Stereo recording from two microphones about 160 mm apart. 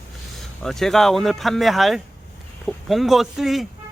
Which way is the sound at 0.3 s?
Centre (ahead or behind).